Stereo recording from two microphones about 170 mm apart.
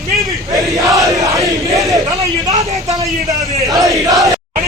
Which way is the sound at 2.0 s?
20° right (ahead or behind).